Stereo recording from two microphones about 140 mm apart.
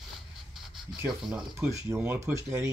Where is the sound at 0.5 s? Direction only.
Centre (ahead or behind).